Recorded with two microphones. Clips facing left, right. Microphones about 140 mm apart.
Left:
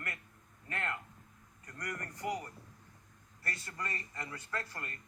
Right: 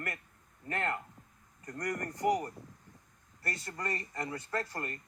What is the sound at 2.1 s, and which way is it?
Speech, 20° right (ahead or behind).